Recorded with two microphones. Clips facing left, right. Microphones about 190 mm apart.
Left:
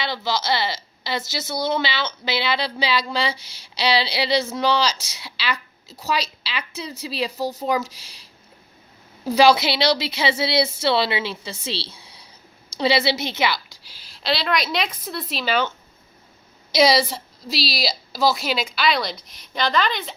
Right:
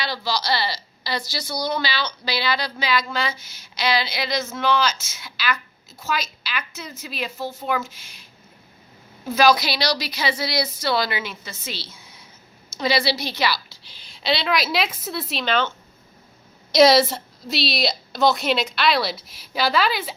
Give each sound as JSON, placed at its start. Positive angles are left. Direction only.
{"t": 0.0, "sound": "a woman's voice", "side_deg": 20}
{"t": 9.2, "sound": "a woman's voice", "side_deg": 30}
{"t": 13.8, "sound": "a woman's voice", "side_deg": 5}
{"t": 16.7, "sound": "a woman's voice", "side_deg": 0}